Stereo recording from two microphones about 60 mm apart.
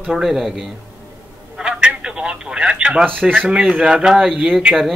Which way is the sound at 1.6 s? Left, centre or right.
Centre.